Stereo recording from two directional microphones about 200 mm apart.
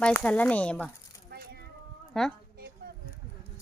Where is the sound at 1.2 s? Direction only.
50° right (ahead or behind).